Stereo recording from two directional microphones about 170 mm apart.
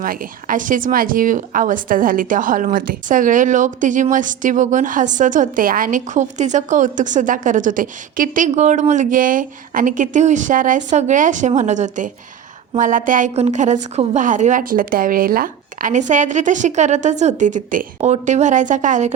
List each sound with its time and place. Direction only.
0.0 s speech: 55° right (ahead or behind)